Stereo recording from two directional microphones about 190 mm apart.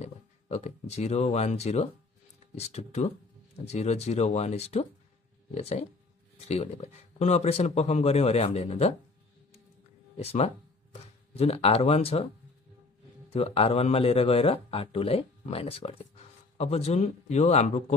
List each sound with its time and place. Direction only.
0.0 s speech: 35° left (ahead or behind)
10.1 s speech: 30° left (ahead or behind)
13.3 s speech: 30° left (ahead or behind)